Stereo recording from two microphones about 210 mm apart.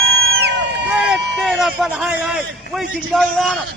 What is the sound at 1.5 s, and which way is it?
A man's voice, centre (ahead or behind).